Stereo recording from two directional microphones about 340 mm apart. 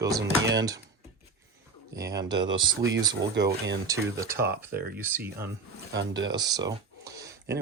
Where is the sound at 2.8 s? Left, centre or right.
Right.